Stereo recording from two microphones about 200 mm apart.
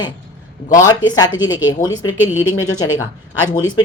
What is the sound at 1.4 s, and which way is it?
Speech, 75° left (ahead or behind).